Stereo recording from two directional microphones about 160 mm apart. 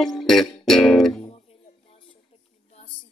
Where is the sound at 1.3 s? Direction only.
35° left (ahead or behind).